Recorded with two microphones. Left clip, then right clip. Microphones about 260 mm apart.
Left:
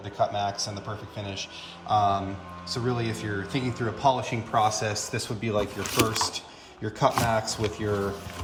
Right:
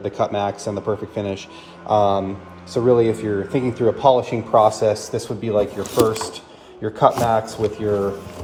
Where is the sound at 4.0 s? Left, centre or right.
Left.